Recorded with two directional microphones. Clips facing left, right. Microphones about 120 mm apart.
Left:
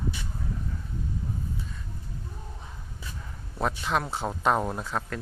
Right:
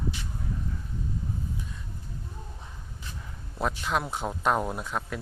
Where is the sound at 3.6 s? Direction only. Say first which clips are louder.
Left 1 dB; centre (ahead or behind).